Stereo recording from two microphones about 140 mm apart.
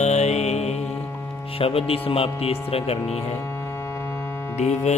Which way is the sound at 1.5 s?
40° left (ahead or behind).